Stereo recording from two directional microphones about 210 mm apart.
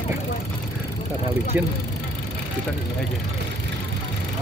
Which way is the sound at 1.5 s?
10° right (ahead or behind).